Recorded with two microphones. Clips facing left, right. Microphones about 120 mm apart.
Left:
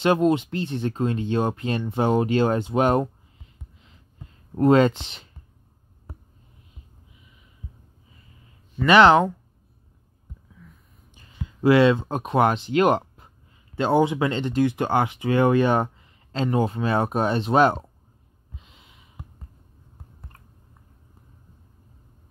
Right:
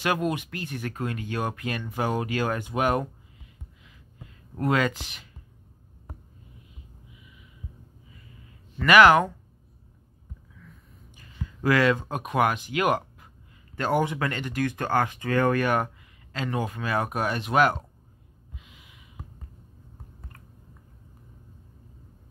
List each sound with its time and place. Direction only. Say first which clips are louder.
0.0 s speech: left 7 dB; 25° left (ahead or behind)
4.6 s speech: left 8 dB; 30° left (ahead or behind)
8.8 s speech: left 2 dB; 25° left (ahead or behind)
11.1 s speech: left 3 dB; 20° left (ahead or behind)
18.6 s snort: right 1 dB; 30° left (ahead or behind)